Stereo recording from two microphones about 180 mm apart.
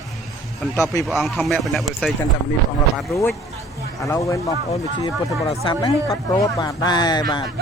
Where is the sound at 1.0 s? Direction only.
Centre (ahead or behind).